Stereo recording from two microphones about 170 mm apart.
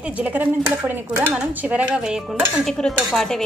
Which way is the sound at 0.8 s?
10° right (ahead or behind).